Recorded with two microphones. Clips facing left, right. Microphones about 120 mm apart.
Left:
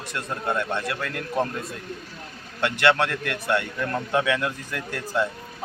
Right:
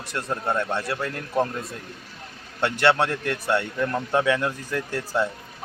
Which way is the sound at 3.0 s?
25° right (ahead or behind).